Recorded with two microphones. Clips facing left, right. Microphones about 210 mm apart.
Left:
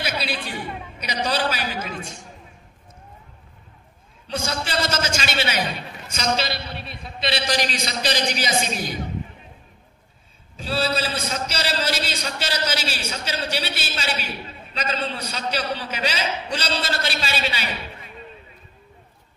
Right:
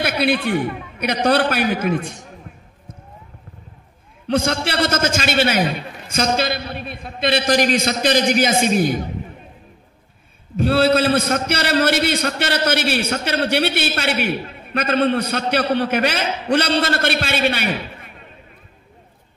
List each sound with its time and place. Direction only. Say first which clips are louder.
0.0 s a man's voice: right 9 dB; 55° right (ahead or behind)
4.3 s a man's voice: right 8 dB; 60° right (ahead or behind)
10.5 s a man's voice: right 9 dB; 60° right (ahead or behind)